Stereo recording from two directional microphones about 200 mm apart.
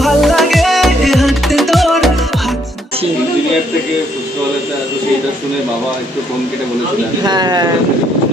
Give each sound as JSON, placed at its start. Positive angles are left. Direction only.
{"t": 0.0, "sound": "music", "side_deg": 0}
{"t": 7.2, "sound": "speech", "side_deg": -20}